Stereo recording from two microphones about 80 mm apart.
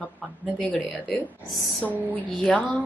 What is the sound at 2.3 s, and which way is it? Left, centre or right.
Speech, centre.